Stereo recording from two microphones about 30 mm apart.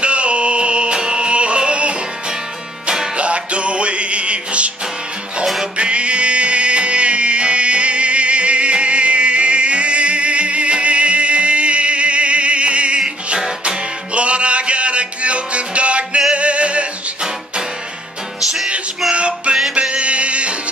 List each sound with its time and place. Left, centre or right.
0.0 s music: right
1.3 s music: right
3.2 s music: right
5.8 s music: right
13.0 s music: right
19.1 s music: right